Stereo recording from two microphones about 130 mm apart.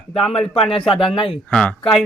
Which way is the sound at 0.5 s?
50° left (ahead or behind).